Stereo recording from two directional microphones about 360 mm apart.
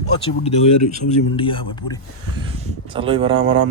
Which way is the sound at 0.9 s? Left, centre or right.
Centre.